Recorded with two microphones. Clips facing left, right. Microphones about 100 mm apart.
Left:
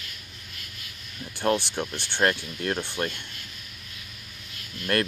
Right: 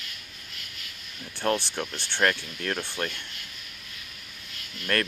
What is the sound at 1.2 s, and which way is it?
Speech, 10° left (ahead or behind).